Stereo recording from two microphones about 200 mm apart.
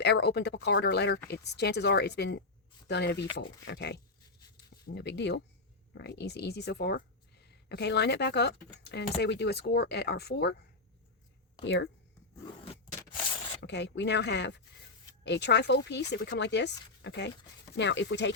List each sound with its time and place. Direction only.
0.0 s speech: 55° left (ahead or behind)
4.5 s a sound: 55° left (ahead or behind)
5.9 s speech: 60° left (ahead or behind)
11.6 s speech: 60° left (ahead or behind)
13.6 s speech: 60° left (ahead or behind)